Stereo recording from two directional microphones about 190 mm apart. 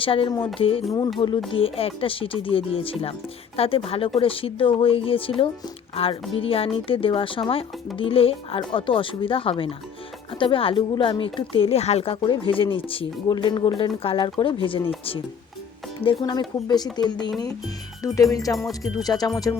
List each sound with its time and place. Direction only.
0.0 s speech: 30° left (ahead or behind)
16.2 s speech: 20° left (ahead or behind)